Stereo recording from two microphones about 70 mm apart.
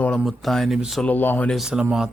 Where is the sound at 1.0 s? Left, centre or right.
Left.